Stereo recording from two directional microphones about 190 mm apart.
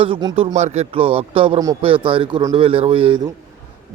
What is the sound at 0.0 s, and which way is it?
Speech, 25° right (ahead or behind).